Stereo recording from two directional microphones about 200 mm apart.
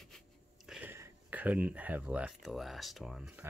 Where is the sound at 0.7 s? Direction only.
10° right (ahead or behind).